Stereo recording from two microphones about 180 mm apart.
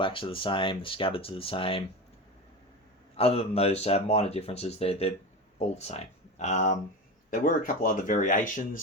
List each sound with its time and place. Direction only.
0.0 s speech: 30° left (ahead or behind)
3.2 s speech: 35° left (ahead or behind)